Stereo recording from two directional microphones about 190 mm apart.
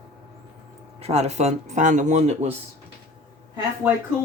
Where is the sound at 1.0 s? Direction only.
35° right (ahead or behind).